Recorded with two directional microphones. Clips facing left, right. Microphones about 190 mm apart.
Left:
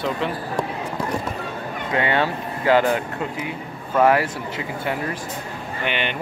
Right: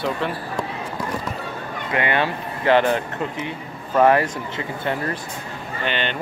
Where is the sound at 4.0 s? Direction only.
10° left (ahead or behind).